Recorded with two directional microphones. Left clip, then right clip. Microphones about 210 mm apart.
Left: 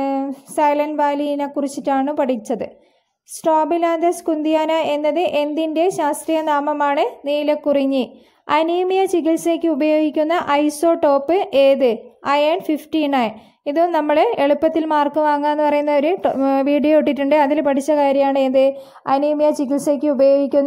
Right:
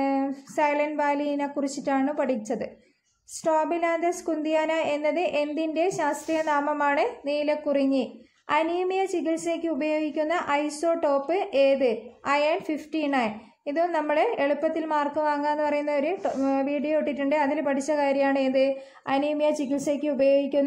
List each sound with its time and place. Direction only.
0.0 s a woman's voice: 30° left (ahead or behind)